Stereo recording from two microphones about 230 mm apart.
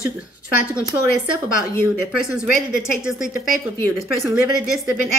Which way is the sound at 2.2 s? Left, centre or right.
Centre.